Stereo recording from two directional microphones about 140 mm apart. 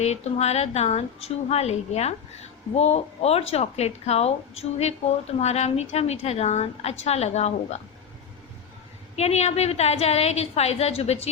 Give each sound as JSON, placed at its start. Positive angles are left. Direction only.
{"t": 0.0, "sound": "a woman's voice", "side_deg": 50}
{"t": 9.1, "sound": "a woman's voice", "side_deg": 50}